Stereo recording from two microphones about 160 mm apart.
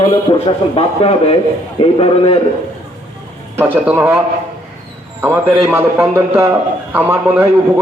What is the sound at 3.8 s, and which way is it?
Speech, 10° right (ahead or behind).